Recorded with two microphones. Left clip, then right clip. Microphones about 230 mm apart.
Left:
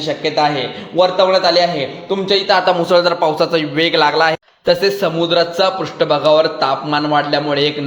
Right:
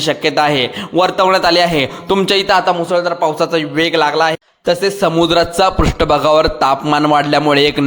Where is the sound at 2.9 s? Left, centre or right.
Centre.